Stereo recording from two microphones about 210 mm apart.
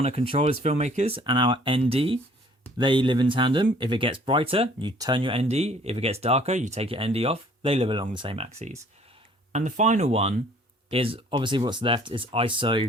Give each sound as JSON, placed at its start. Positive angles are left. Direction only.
{"t": 0.0, "sound": "speech", "side_deg": -30}